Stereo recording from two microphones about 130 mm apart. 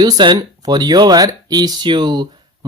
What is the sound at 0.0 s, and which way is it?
Speech, 35° right (ahead or behind).